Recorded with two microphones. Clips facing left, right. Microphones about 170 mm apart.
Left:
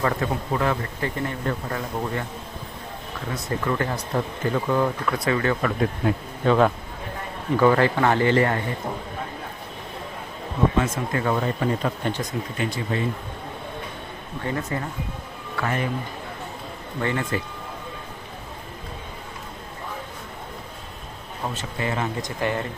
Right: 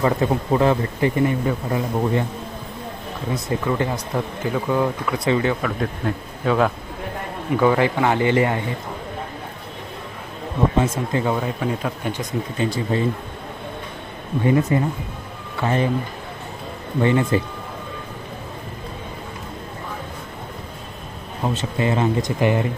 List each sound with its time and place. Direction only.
0.0 s speech: 25° right (ahead or behind)
1.1 s speech: 10° right (ahead or behind)
3.6 s speech: 10° right (ahead or behind)
5.2 s speech: 20° right (ahead or behind)
6.4 s speech: centre (ahead or behind)
7.5 s speech: 15° right (ahead or behind)
10.8 s speech: 25° right (ahead or behind)
11.3 s speech: 5° right (ahead or behind)
12.5 s speech: 30° right (ahead or behind)
14.4 s speech: 15° right (ahead or behind)
15.6 s speech: 30° right (ahead or behind)
17.0 s speech: 20° right (ahead or behind)
21.4 s speech: 25° right (ahead or behind)